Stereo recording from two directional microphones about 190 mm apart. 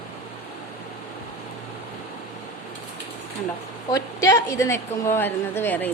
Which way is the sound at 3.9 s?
15° left (ahead or behind).